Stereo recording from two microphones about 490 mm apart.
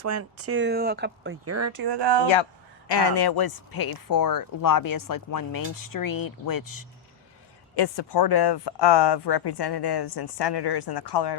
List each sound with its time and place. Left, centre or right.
0.0 s speech: right
1.8 s speech: right
2.3 s speech: left
7.8 s speech: left